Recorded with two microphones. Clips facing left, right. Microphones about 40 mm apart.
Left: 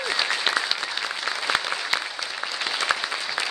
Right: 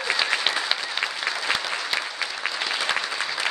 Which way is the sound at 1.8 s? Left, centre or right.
Centre.